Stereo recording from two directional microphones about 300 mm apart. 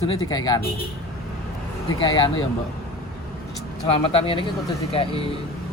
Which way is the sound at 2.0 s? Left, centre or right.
Centre.